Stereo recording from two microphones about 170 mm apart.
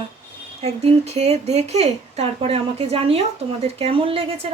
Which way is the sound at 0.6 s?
40° right (ahead or behind).